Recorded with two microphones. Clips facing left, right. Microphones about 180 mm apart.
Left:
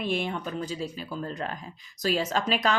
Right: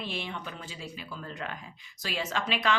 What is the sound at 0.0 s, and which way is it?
Speech, 50° left (ahead or behind).